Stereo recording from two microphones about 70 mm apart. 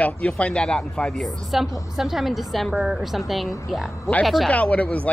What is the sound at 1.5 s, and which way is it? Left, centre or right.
A woman's voice, centre.